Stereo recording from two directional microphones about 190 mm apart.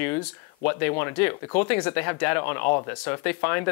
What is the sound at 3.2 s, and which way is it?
Speech, 10° left (ahead or behind).